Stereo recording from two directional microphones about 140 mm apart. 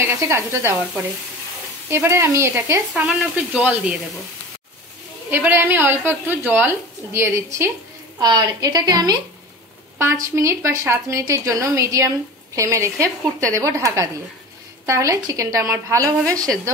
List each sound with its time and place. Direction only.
0.2 s a woman's voice: 20° right (ahead or behind)
1.9 s a woman's voice: 20° right (ahead or behind)
2.9 s frying: 5° right (ahead or behind)
5.3 s a woman's voice: 15° right (ahead or behind)